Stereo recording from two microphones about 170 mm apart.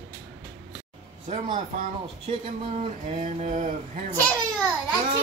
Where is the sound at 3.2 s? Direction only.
45° right (ahead or behind).